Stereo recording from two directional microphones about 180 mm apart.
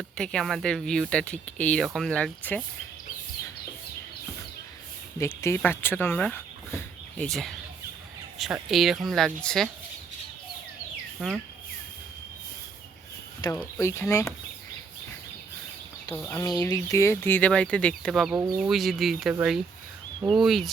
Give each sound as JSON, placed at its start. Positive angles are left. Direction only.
{"t": 0.2, "sound": "speech", "side_deg": 5}
{"t": 5.2, "sound": "speech", "side_deg": 15}
{"t": 11.2, "sound": "speech", "side_deg": -5}
{"t": 13.4, "sound": "speech", "side_deg": 25}
{"t": 16.1, "sound": "speech", "side_deg": 15}